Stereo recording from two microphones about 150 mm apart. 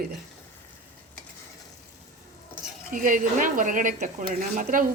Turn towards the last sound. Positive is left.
turn(degrees=-65)  # may be behind; listen again after turning